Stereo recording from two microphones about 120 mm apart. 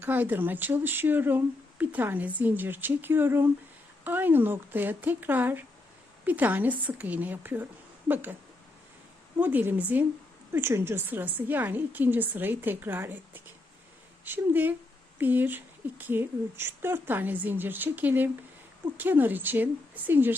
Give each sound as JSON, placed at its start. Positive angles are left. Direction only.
{"t": 0.0, "sound": "a woman's voice", "side_deg": -15}
{"t": 9.4, "sound": "a woman's voice", "side_deg": -15}